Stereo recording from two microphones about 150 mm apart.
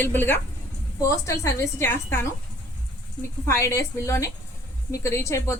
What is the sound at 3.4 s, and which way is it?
A woman's voice, 20° left (ahead or behind).